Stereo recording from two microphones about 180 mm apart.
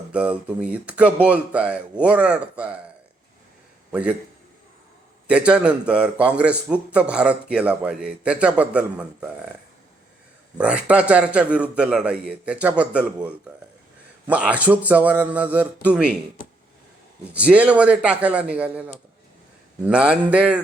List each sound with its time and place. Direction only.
0.1 s a man's voice: 5° right (ahead or behind)
5.3 s a man's voice: 5° right (ahead or behind)
10.6 s a man's voice: 5° right (ahead or behind)
17.3 s a man's voice: 5° right (ahead or behind)